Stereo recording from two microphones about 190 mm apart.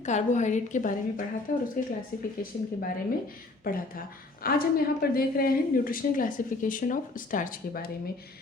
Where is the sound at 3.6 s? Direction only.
50° left (ahead or behind).